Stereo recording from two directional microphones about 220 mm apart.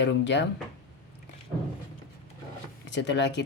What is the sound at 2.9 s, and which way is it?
Speech, 55° left (ahead or behind).